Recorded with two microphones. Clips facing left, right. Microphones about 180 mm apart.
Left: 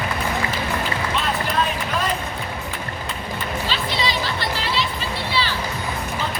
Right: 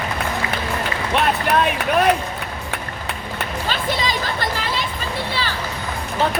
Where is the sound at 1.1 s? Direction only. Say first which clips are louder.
Right 7 dB; 65° right (ahead or behind).